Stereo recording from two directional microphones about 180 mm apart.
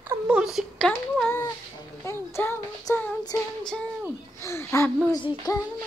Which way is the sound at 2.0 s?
15° left (ahead or behind).